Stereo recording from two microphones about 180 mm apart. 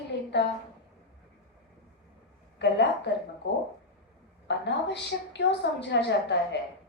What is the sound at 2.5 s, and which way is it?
Speech, 75° left (ahead or behind).